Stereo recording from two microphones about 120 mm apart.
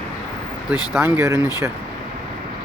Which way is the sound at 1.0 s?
20° right (ahead or behind).